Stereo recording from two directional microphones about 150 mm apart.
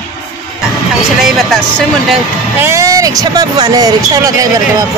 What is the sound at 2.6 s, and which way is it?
Speech, 20° right (ahead or behind).